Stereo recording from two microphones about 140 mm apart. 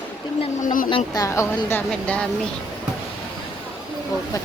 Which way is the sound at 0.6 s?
75° left (ahead or behind).